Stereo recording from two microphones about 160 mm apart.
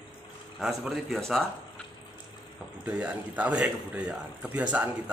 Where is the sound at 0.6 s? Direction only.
Centre (ahead or behind).